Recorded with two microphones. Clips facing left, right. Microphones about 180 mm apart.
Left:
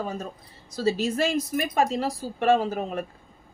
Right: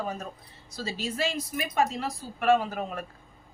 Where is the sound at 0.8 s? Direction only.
45° left (ahead or behind); by 3.0 s 25° left (ahead or behind).